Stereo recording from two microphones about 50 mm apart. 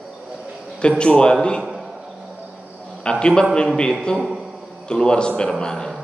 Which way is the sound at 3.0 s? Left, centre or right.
Centre.